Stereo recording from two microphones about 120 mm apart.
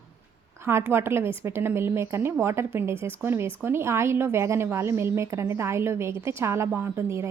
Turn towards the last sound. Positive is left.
turn(degrees=-20)  # may be behind; listen again after turning